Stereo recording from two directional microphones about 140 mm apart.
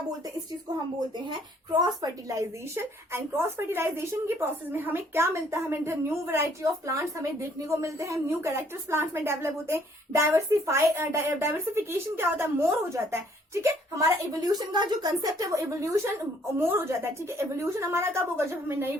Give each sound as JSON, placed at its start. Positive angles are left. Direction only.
{"t": 1.3, "sound": "speech", "side_deg": -30}